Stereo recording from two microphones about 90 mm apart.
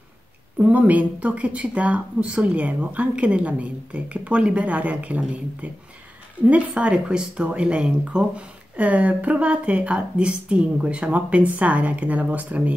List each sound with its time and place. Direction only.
0.6 s speech: 15° right (ahead or behind)